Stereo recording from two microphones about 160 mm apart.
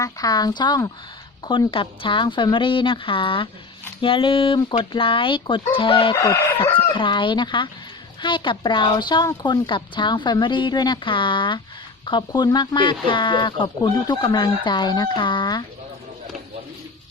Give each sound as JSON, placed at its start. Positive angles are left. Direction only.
{"t": 0.0, "sound": "speech", "side_deg": 25}
{"t": 6.1, "sound": "speech", "side_deg": 20}
{"t": 6.9, "sound": "speech", "side_deg": 30}